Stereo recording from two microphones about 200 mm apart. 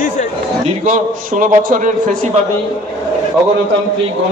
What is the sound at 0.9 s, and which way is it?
A man's voice, 40° right (ahead or behind).